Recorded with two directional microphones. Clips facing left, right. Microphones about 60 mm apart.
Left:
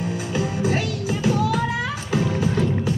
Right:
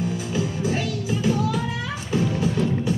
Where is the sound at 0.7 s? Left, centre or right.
Left.